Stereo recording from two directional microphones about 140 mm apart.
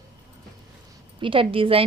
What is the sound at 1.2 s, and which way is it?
Speech, 40° right (ahead or behind).